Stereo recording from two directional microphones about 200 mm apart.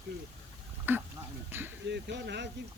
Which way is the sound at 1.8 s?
60° right (ahead or behind).